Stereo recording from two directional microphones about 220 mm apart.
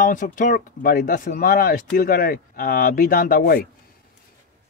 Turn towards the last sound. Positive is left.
turn(degrees=40)  # may be behind; listen again after turning